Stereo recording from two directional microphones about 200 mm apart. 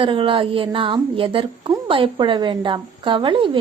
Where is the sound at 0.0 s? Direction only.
25° right (ahead or behind).